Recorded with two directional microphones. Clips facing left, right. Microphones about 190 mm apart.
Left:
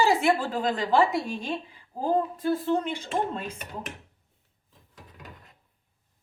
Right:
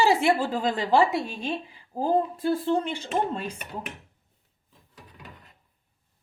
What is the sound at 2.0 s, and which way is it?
Speech, 35° right (ahead or behind).